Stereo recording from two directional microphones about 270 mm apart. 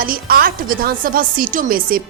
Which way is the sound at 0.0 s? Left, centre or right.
Right.